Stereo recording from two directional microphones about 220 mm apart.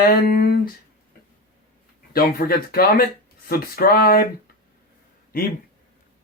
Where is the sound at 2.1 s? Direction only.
45° left (ahead or behind).